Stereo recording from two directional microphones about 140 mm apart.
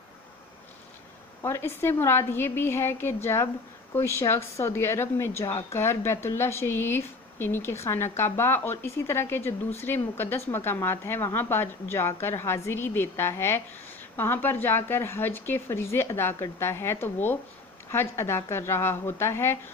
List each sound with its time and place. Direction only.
1.4 s speech: 20° left (ahead or behind)